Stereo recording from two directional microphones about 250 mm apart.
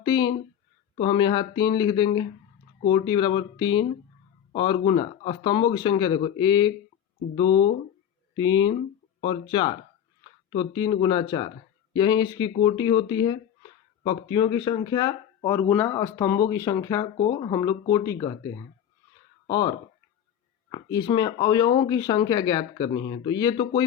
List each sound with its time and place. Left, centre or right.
0.0 s speech: centre